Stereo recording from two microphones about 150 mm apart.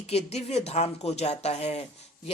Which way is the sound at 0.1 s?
45° left (ahead or behind).